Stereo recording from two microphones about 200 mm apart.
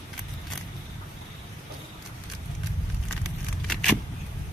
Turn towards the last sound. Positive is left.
turn(degrees=5)  # may be behind; listen again after turning